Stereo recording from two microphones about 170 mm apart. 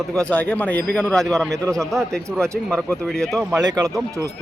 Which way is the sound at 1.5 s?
20° right (ahead or behind).